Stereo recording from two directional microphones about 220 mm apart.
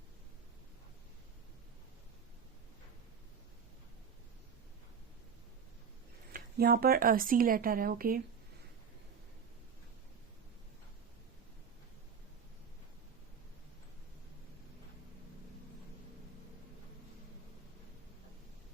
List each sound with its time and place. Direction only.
6.3 s speech: 45° right (ahead or behind)